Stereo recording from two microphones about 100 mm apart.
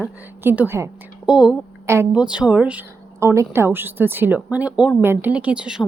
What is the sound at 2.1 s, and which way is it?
Speech, 10° right (ahead or behind).